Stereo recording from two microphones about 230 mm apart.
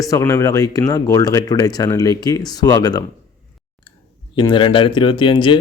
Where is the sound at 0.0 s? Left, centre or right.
Centre.